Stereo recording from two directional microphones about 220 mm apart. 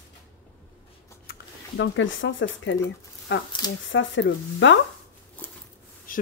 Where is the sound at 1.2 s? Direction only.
55° left (ahead or behind).